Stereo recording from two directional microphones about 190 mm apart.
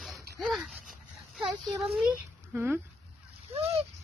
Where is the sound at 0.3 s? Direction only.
Centre (ahead or behind).